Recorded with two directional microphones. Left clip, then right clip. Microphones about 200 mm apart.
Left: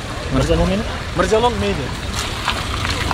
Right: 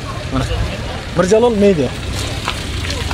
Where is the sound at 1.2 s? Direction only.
15° right (ahead or behind).